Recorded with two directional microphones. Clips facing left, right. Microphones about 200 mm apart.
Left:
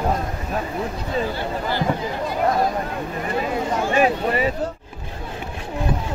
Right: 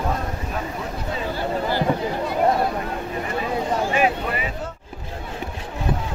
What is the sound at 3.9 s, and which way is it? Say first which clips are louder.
Speech: left 3 dB; 40° left (ahead or behind).